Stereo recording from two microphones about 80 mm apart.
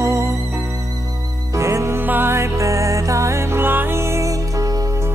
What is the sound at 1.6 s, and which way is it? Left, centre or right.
Music, right.